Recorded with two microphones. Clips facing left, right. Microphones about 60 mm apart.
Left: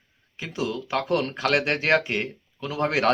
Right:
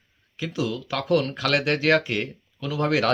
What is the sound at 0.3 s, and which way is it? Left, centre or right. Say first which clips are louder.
Speech: right 1 dB; left.